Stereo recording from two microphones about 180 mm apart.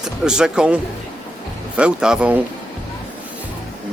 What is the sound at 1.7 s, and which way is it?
Speech, 5° right (ahead or behind).